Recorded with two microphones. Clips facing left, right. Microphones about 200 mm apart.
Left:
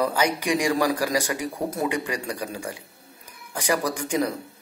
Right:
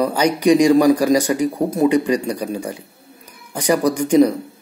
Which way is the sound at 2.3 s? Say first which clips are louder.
Right 8 dB; 20° right (ahead or behind).